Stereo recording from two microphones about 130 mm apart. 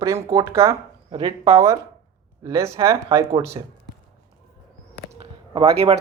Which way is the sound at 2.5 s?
20° right (ahead or behind).